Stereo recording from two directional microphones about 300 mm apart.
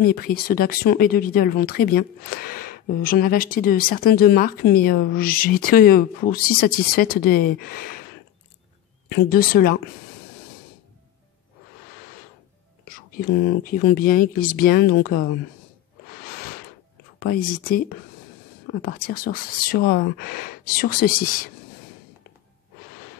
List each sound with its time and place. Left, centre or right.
0.0 s speech: left
9.1 s speech: left
12.8 s speech: left
17.2 s speech: left